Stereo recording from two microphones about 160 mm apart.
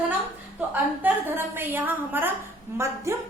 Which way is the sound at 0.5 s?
10° right (ahead or behind).